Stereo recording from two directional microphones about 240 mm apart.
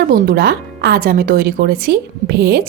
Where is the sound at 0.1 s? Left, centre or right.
Right.